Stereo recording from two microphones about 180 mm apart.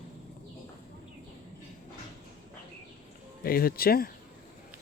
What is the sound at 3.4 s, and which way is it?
Speech, 55° left (ahead or behind).